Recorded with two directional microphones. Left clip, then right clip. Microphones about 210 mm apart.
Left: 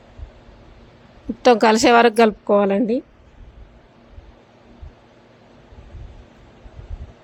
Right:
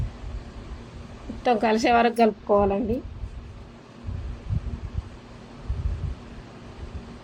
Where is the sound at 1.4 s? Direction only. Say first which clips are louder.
Left 8 dB; 55° left (ahead or behind).